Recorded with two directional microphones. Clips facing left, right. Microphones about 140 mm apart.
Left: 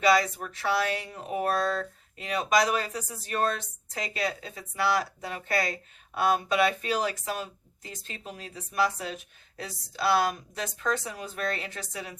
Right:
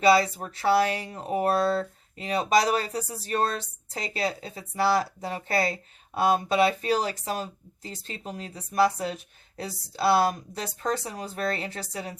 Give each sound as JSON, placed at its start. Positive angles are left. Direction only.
{"t": 0.0, "sound": "speech", "side_deg": -30}